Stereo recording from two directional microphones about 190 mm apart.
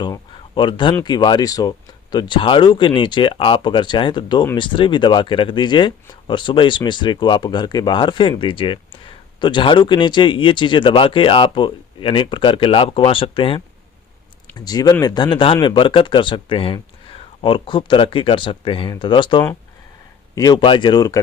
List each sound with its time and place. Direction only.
0.0 s speech: 25° left (ahead or behind)